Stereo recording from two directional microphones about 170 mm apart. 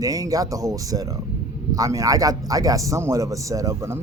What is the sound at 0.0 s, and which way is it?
A man's voice, 20° right (ahead or behind).